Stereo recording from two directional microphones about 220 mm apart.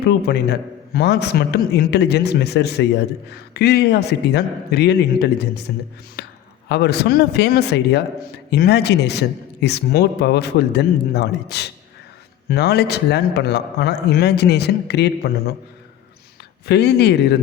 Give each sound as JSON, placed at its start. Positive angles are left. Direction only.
{"t": 0.0, "sound": "a man's voice", "side_deg": 45}
{"t": 6.2, "sound": "a sound", "side_deg": 50}
{"t": 6.7, "sound": "a man's voice", "side_deg": 50}
{"t": 16.6, "sound": "a man's voice", "side_deg": 50}